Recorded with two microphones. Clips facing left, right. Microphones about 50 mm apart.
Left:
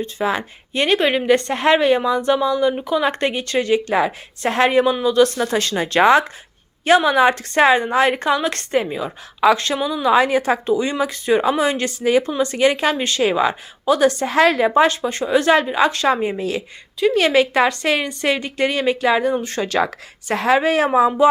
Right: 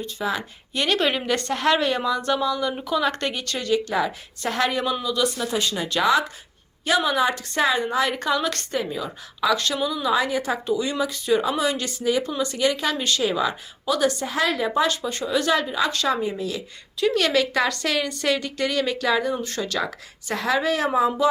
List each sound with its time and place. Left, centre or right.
0.0 s a woman's voice: left
1.0 s a woman's voice: centre; by 4.9 s left
5.2 s a woman's voice: left
10.1 s a woman's voice: left
14.8 s a woman's voice: left
17.2 s a woman's voice: left